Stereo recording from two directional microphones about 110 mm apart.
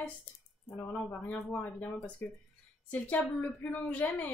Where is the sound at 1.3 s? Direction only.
15° left (ahead or behind).